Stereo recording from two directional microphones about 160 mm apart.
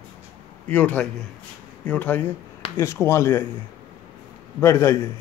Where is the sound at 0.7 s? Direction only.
10° left (ahead or behind).